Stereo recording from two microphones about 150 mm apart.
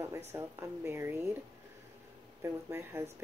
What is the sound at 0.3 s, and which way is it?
Speech, 20° right (ahead or behind).